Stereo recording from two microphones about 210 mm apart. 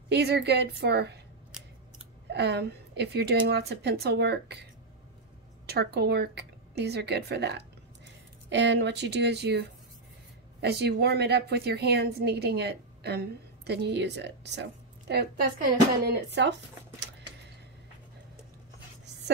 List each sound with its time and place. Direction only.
0.1 s a woman's voice: 50° right (ahead or behind)
2.2 s a woman's voice: 50° right (ahead or behind)
5.7 s a woman's voice: 50° right (ahead or behind)